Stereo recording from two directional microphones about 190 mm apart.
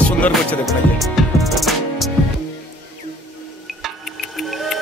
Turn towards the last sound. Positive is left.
turn(degrees=0)  # may be behind; listen again after turning